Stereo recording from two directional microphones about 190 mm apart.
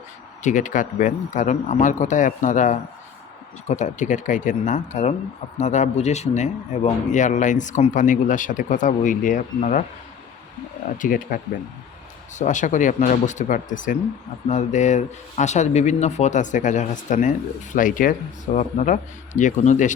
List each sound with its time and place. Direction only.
0.4 s speech: 40° left (ahead or behind)
10.9 s speech: 45° left (ahead or behind)
12.4 s speech: 40° left (ahead or behind)